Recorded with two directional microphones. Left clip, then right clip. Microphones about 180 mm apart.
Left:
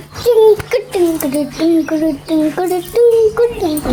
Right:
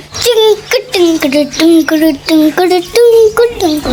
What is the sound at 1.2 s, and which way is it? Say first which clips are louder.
A child's voice: right 7 dB; 15° right (ahead or behind).